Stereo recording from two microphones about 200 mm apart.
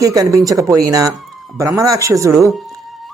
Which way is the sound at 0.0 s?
15° right (ahead or behind).